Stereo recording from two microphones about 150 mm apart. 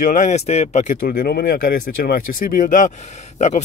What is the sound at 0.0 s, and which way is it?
Speech, 55° left (ahead or behind).